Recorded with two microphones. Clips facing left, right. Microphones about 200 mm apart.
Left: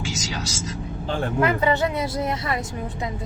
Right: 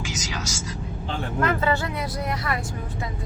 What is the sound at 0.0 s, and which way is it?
Speech, 25° left (ahead or behind).